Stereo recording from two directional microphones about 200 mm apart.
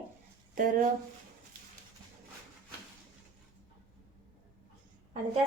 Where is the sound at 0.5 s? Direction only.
45° right (ahead or behind).